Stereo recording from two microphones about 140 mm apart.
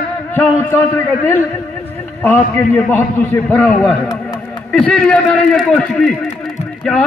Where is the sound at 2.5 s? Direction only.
15° left (ahead or behind).